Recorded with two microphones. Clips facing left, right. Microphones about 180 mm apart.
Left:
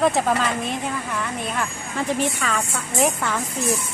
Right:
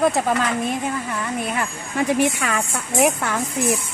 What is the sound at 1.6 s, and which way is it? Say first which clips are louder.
A woman's voice: right 3 dB; 10° right (ahead or behind).